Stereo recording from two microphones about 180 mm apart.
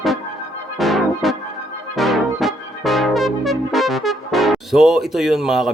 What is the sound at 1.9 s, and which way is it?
Brass instrument, centre (ahead or behind).